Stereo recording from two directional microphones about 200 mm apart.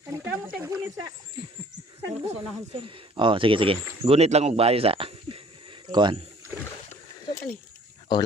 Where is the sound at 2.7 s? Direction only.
25° right (ahead or behind).